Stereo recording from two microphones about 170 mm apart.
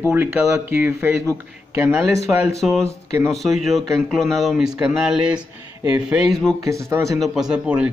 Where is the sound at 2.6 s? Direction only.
5° right (ahead or behind).